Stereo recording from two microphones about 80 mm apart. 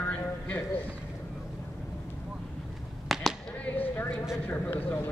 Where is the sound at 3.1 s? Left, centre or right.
Centre.